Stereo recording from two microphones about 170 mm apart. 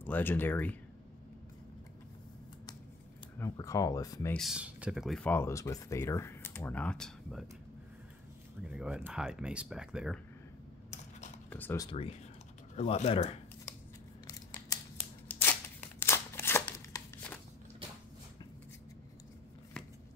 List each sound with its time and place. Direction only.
0.0 s speech: 10° left (ahead or behind)
3.3 s speech: 20° left (ahead or behind)
4.3 s speech: centre (ahead or behind)
5.3 s speech: 15° left (ahead or behind)
8.6 s speech: 5° right (ahead or behind)
11.5 s speech: 10° left (ahead or behind)
11.8 s speech: 35° left (ahead or behind)
15.2 s scissors: 10° left (ahead or behind)